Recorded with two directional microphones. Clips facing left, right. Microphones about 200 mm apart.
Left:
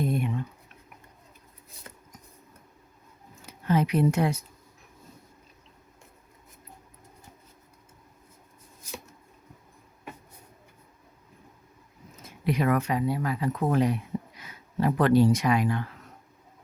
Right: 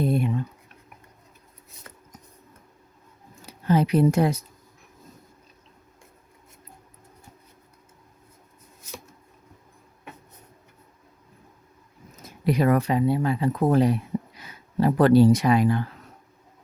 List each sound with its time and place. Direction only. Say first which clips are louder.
0.0 s a sound: right 4 dB; 30° right (ahead or behind)
3.4 s speech: right 3 dB; 35° right (ahead or behind)
12.2 s speech: right 4 dB; 35° right (ahead or behind)